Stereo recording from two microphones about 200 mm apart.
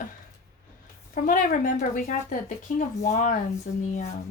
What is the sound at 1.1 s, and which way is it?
Speech, 40° left (ahead or behind).